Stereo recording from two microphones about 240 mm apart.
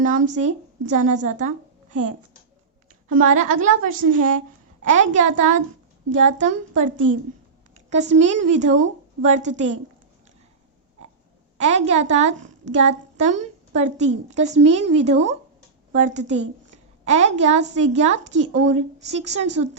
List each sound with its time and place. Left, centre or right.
0.0 s a woman's voice: right
11.5 s a woman's voice: right